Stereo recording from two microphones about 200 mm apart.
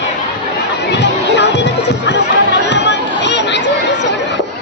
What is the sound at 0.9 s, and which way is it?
Music, 60° left (ahead or behind).